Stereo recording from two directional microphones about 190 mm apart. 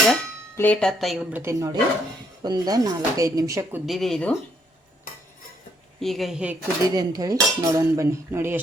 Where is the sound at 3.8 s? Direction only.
Centre (ahead or behind).